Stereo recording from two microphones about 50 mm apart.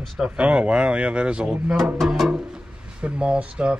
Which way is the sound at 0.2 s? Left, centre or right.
Right.